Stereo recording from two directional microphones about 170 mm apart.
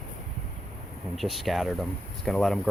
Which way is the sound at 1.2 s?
Centre (ahead or behind).